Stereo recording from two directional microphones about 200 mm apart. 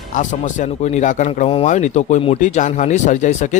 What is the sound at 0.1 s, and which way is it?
A man's voice, 40° left (ahead or behind).